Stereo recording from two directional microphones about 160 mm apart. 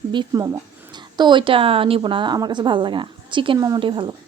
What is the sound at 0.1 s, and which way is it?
A woman's voice, 25° right (ahead or behind).